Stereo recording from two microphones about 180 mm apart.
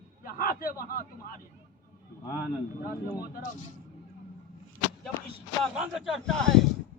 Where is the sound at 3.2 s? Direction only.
55° left (ahead or behind).